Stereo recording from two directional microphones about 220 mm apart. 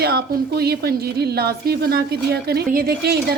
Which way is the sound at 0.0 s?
45° right (ahead or behind).